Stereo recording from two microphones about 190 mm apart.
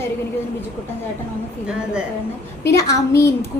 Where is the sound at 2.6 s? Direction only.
15° left (ahead or behind).